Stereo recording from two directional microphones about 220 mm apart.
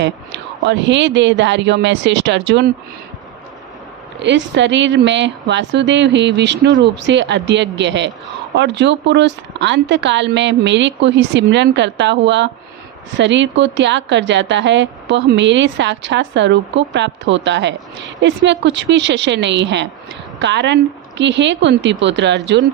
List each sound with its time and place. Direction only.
0.0 s a woman's voice: 55° right (ahead or behind)
4.2 s a woman's voice: 55° right (ahead or behind)